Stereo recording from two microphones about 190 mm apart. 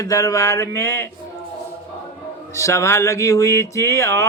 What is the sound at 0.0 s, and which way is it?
Speech, 15° left (ahead or behind).